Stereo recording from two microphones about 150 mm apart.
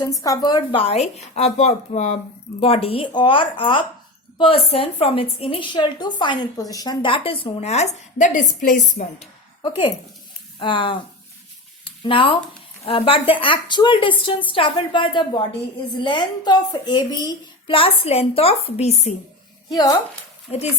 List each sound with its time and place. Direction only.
0.0 s a woman's voice: 25° left (ahead or behind); by 9.2 s 55° left (ahead or behind)
9.6 s a woman's voice: 30° left (ahead or behind)
19.7 s a woman's voice: 25° left (ahead or behind)